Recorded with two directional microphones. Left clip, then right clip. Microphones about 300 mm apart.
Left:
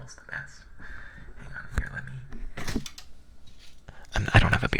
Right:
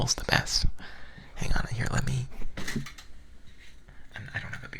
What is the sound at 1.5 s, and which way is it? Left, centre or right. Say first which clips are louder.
Speech: right 3 dB; right.